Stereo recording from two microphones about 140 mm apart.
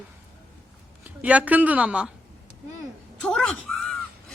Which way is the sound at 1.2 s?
10° right (ahead or behind).